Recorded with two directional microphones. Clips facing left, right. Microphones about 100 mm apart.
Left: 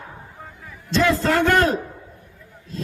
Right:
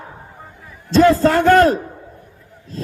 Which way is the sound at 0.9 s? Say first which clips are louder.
Right 7 dB; 35° right (ahead or behind).